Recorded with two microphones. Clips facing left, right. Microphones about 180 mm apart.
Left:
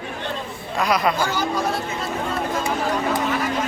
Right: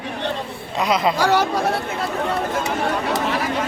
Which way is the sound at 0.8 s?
20° right (ahead or behind).